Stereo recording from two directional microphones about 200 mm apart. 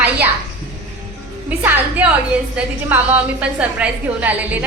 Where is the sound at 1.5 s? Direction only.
10° right (ahead or behind).